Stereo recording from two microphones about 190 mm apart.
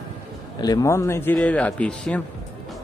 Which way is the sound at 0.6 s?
20° left (ahead or behind).